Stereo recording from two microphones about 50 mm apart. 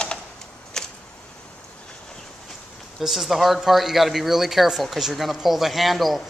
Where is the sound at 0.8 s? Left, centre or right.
Centre.